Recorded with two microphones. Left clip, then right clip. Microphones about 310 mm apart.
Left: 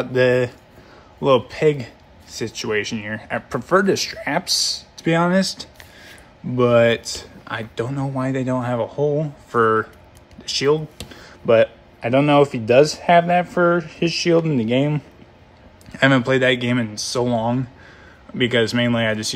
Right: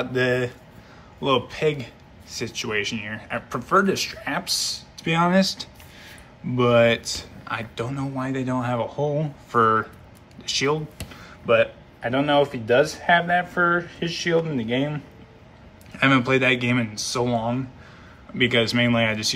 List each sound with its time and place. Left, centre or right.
0.0 s speech: centre